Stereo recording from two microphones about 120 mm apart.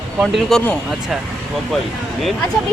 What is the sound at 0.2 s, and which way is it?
Speech, centre (ahead or behind).